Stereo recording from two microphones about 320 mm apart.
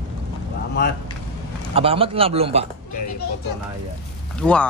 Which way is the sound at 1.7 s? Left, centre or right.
Centre.